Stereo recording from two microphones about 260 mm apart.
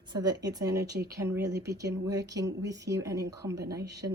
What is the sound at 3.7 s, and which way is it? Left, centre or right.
Speech, right.